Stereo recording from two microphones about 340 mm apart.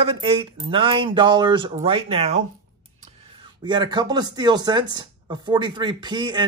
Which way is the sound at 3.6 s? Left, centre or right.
Centre.